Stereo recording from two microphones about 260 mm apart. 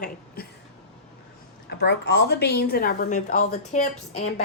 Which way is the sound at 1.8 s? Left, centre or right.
Left.